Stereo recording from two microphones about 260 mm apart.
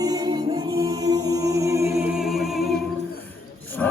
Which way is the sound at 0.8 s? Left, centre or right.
Centre.